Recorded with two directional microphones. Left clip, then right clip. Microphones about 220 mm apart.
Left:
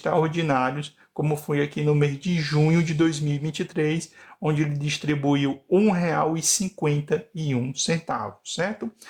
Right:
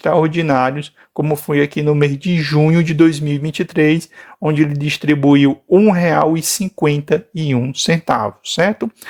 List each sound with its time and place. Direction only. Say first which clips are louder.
0.0 s speech: right 9 dB; 30° right (ahead or behind)